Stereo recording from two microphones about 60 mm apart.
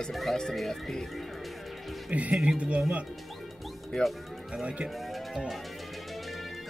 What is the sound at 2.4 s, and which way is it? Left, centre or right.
Speech, right.